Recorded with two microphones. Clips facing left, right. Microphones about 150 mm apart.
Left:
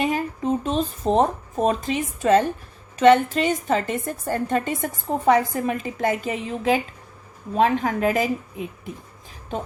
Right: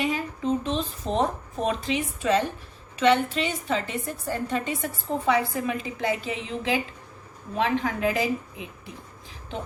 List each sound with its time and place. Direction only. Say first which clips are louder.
0.0 s a woman's voice: left 3 dB; 45° left (ahead or behind)